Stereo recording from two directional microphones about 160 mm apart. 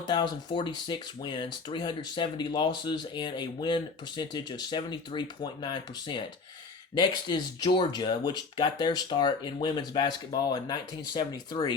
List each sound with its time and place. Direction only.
0.1 s speech: 30° left (ahead or behind)